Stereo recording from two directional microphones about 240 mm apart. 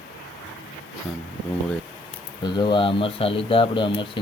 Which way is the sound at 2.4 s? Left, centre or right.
Centre.